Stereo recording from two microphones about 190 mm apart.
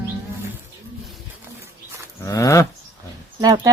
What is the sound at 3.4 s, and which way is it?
Speech, 20° right (ahead or behind).